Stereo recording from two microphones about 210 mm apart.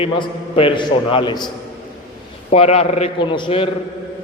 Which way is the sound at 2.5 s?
30° left (ahead or behind).